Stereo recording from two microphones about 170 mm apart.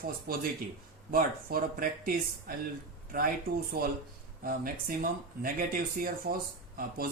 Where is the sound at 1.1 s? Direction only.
60° right (ahead or behind).